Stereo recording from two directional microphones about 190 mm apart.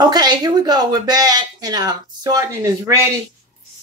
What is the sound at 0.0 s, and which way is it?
Speech, 20° right (ahead or behind).